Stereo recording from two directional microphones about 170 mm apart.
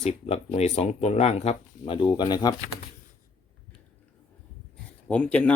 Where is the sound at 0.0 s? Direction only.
40° left (ahead or behind).